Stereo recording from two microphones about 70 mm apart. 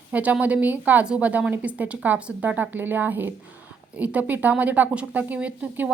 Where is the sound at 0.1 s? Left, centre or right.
Right.